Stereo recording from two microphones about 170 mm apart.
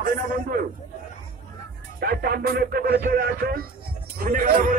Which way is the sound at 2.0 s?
65° right (ahead or behind).